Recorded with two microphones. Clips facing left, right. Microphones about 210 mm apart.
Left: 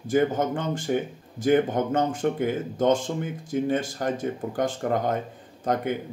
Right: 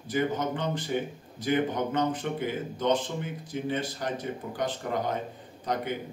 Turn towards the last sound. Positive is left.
turn(degrees=50)  # may be behind; listen again after turning